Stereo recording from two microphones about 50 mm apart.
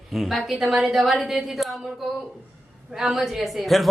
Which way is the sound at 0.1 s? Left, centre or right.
Centre.